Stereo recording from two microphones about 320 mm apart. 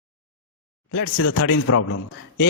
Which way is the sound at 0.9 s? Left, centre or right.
Left.